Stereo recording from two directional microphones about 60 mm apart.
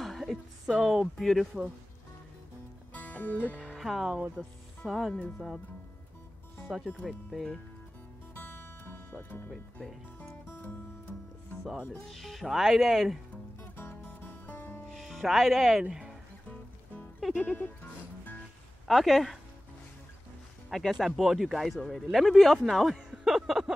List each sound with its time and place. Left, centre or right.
0.0 s speech: centre
2.9 s music: left
3.7 s speech: centre
7.1 s speech: centre
8.4 s music: left
12.1 s speech: centre
14.2 s music: left
15.0 s speech: centre
15.9 s music: centre
17.2 s music: centre
18.9 s speech: centre
20.7 s speech: centre